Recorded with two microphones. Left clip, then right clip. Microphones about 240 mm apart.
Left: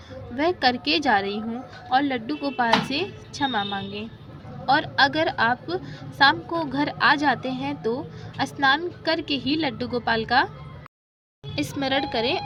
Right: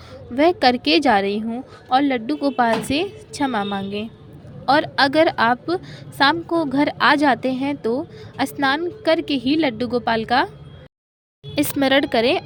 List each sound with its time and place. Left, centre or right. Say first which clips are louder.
0.3 s a woman's voice: right 6 dB; right
11.5 s a woman's voice: right 7 dB; right